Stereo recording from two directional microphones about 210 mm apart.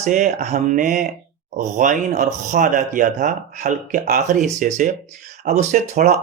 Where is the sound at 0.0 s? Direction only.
35° right (ahead or behind).